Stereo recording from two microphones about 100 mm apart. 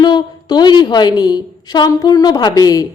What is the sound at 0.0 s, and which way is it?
A woman's voice, 45° left (ahead or behind).